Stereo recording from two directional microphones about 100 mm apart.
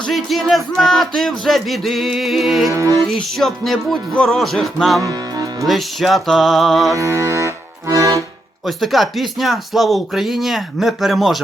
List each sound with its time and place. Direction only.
0.0 s speech: centre (ahead or behind)
2.6 s music: 30° right (ahead or behind)
3.0 s speech: 5° left (ahead or behind)
5.0 s music: 40° right (ahead or behind)
5.6 s speech: centre (ahead or behind)
6.9 s accordion: 30° right (ahead or behind)
8.6 s speech: centre (ahead or behind)